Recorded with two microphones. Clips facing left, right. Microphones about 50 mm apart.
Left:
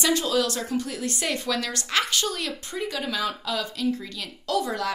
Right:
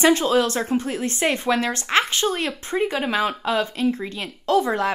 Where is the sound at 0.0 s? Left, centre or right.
Right.